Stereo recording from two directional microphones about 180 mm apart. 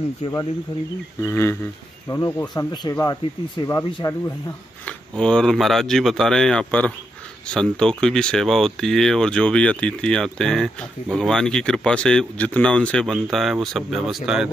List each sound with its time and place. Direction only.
1.2 s speech: 15° left (ahead or behind)
4.8 s speech: 5° left (ahead or behind)